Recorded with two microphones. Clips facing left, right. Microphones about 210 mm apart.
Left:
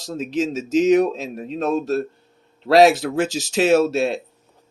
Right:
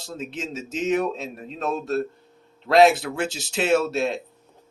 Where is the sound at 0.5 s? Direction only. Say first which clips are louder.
Left 11 dB; 85° left.